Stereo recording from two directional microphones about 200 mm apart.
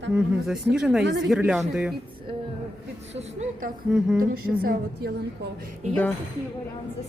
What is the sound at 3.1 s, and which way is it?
Speech, 35° right (ahead or behind).